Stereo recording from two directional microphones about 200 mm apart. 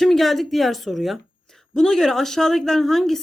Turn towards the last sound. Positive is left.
turn(degrees=0)  # may be behind; listen again after turning